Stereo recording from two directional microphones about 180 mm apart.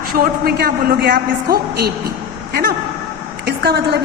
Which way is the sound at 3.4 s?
65° right (ahead or behind).